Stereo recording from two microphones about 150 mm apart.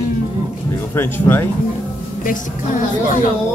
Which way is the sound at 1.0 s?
15° left (ahead or behind).